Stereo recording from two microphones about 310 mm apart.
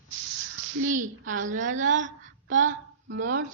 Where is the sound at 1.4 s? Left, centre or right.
Right.